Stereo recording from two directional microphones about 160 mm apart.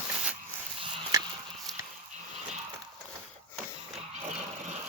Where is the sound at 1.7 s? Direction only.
Centre (ahead or behind).